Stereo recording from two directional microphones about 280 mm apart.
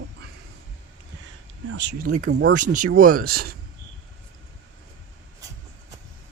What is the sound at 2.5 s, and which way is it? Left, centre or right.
Speech, right.